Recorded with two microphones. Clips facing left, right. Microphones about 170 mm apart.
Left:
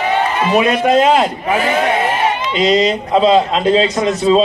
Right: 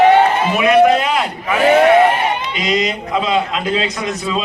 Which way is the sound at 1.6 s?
65° right (ahead or behind).